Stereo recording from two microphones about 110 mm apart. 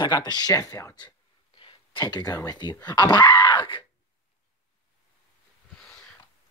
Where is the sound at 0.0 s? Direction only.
40° left (ahead or behind).